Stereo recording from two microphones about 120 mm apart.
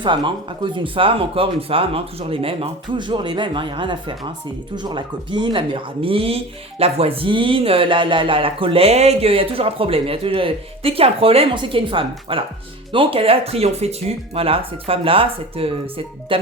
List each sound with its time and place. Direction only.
0.0 s speech: 40° right (ahead or behind)